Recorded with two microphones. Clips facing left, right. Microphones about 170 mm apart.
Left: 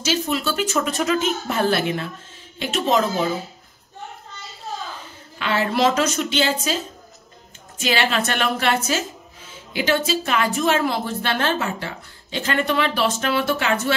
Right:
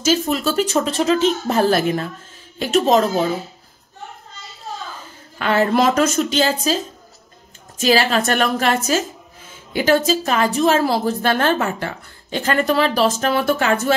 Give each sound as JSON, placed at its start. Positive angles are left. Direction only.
{"t": 0.0, "sound": "a woman's voice", "side_deg": -45}
{"t": 5.4, "sound": "a woman's voice", "side_deg": -45}
{"t": 7.8, "sound": "a woman's voice", "side_deg": -40}